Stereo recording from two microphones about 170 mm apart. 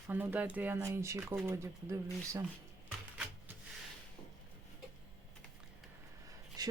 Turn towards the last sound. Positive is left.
turn(degrees=-25)  # may be behind; listen again after turning